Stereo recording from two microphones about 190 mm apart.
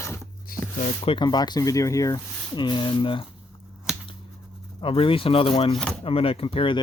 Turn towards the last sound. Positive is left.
turn(degrees=30)  # may be behind; listen again after turning